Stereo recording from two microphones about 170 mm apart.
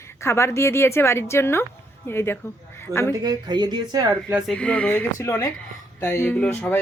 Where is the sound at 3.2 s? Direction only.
25° right (ahead or behind).